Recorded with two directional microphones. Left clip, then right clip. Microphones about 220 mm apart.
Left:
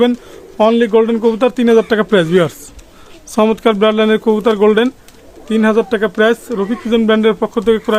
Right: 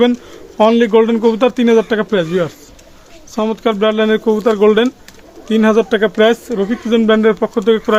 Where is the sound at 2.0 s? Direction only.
25° left (ahead or behind).